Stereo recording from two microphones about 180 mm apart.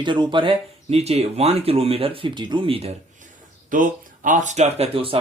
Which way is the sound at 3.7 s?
45° right (ahead or behind).